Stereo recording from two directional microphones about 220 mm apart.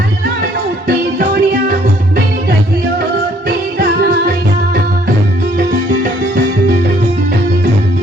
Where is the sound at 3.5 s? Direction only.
45° right (ahead or behind).